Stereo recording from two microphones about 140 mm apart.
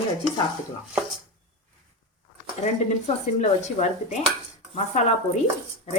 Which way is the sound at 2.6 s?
55° left (ahead or behind).